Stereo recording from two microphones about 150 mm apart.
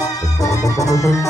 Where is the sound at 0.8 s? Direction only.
20° left (ahead or behind).